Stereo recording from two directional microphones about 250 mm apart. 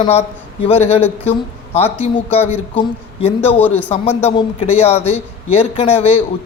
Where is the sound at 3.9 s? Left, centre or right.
Left.